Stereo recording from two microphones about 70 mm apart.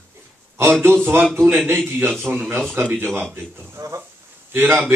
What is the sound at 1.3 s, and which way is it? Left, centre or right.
A man's voice, right.